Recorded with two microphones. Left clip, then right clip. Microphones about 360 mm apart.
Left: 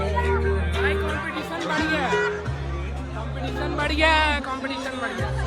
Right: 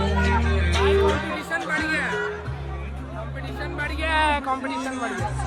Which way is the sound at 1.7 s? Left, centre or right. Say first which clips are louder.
Left 1 dB; centre.